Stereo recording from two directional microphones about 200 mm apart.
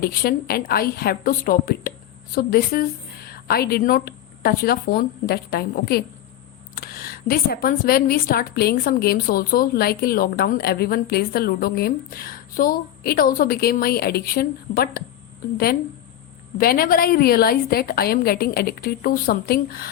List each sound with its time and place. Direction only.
0.0 s a woman's voice: 50° left (ahead or behind)
16.6 s a woman's voice: 45° left (ahead or behind)